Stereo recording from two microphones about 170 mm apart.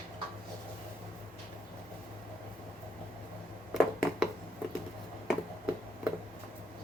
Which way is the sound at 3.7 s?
Centre (ahead or behind).